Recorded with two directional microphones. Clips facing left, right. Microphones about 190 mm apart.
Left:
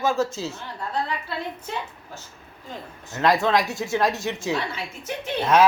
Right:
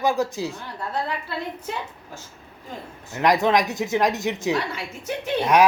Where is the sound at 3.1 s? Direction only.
15° right (ahead or behind).